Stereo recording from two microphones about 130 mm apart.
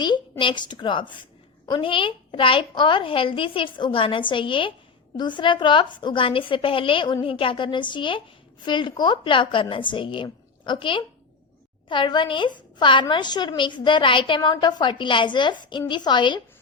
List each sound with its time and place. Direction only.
0.0 s a woman's voice: 35° left (ahead or behind)